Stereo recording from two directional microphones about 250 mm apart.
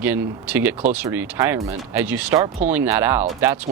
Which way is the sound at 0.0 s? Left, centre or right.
Centre.